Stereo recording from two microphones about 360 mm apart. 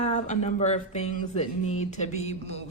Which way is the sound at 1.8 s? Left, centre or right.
Centre.